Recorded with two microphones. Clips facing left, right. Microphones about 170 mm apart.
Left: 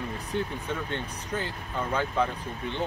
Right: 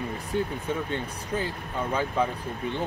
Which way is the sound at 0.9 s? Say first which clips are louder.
Right 2 dB; 10° right (ahead or behind).